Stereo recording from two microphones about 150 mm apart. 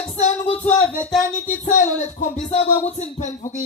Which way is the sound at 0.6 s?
10° left (ahead or behind).